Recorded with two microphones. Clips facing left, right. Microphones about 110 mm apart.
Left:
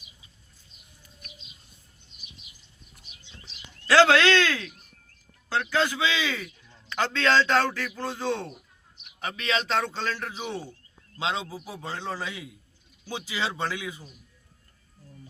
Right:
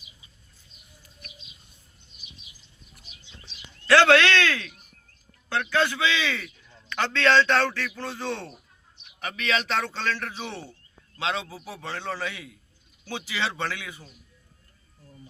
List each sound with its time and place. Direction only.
3.8 s a man's voice: 15° left (ahead or behind)